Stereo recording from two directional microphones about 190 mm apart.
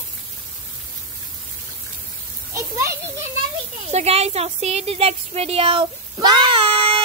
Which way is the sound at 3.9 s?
35° right (ahead or behind).